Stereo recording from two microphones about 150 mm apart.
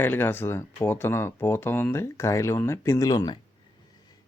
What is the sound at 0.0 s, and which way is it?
Speech, 15° left (ahead or behind).